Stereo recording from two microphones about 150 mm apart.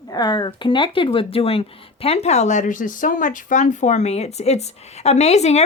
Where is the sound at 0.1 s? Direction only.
30° left (ahead or behind).